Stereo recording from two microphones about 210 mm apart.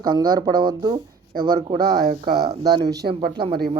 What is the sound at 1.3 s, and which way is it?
Speech, 45° right (ahead or behind).